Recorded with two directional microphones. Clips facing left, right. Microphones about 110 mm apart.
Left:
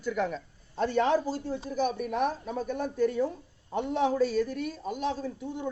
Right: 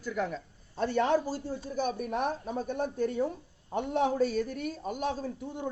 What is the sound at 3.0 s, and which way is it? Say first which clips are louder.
Speech: left 6 dB; 45° right (ahead or behind).